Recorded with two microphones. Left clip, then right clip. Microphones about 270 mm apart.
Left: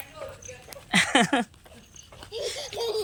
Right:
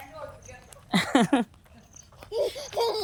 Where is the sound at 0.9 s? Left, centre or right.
Centre.